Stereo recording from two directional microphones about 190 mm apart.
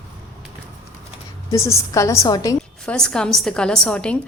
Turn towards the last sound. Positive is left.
turn(degrees=5)  # may be behind; listen again after turning